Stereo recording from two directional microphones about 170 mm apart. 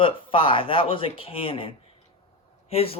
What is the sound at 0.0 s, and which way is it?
Speech, 30° left (ahead or behind).